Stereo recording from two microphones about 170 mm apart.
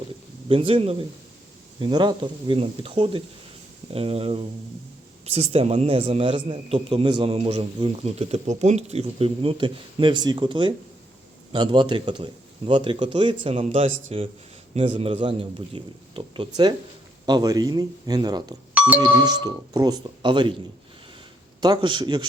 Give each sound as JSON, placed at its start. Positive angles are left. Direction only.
{"t": 0.4, "sound": "a man's voice", "side_deg": -30}
{"t": 13.6, "sound": "a man's voice", "side_deg": -40}
{"t": 18.7, "sound": "music", "side_deg": -10}
{"t": 19.2, "sound": "a man's voice", "side_deg": -25}
{"t": 21.6, "sound": "a man's voice", "side_deg": -25}